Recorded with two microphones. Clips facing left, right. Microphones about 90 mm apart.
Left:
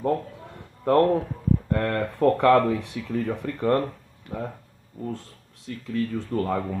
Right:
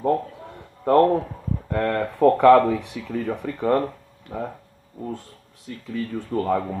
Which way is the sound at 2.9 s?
45° right (ahead or behind).